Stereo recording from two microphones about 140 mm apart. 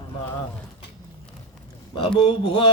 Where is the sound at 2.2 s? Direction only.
35° left (ahead or behind).